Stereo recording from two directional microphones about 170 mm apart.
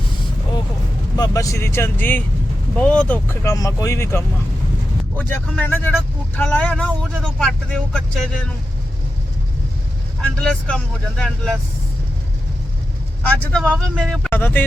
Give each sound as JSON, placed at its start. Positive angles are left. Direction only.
{"t": 1.1, "sound": "speech", "side_deg": 20}
{"t": 10.4, "sound": "speech", "side_deg": 5}
{"t": 13.2, "sound": "speech", "side_deg": 5}